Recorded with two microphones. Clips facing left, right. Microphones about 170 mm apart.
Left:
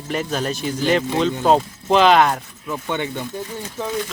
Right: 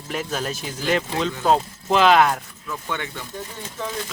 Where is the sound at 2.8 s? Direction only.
25° left (ahead or behind).